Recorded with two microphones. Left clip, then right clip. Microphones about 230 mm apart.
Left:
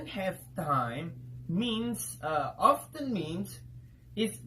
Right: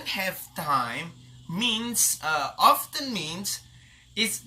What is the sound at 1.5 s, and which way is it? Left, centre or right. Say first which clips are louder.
Speech: right 7 dB; centre.